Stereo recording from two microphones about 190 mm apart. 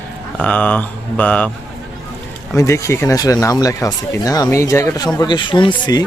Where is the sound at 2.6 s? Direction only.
15° left (ahead or behind).